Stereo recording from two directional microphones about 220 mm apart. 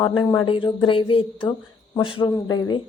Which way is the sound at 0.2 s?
20° left (ahead or behind).